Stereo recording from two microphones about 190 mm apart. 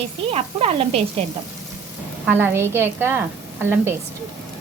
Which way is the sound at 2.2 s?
10° right (ahead or behind).